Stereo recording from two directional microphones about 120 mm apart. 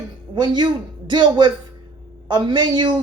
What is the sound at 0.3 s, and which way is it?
Speech, 40° right (ahead or behind).